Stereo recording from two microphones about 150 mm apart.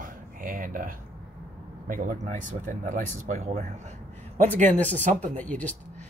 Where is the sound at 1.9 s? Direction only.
55° right (ahead or behind).